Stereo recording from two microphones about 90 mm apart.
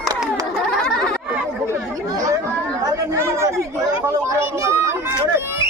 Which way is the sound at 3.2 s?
30° right (ahead or behind).